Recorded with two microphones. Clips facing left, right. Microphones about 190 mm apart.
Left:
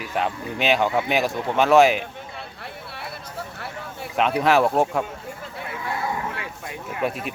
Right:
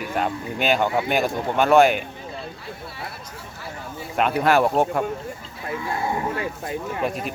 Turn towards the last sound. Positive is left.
turn(degrees=0)  # may be behind; listen again after turning